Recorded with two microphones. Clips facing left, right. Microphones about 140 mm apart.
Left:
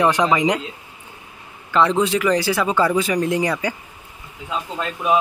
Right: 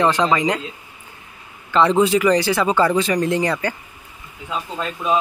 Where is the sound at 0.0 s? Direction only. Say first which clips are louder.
Even; 15° left (ahead or behind).